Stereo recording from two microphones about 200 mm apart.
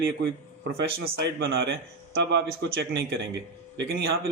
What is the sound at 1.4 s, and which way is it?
Speech, 50° right (ahead or behind).